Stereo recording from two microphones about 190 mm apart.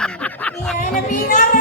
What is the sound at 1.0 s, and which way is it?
Music, 40° left (ahead or behind).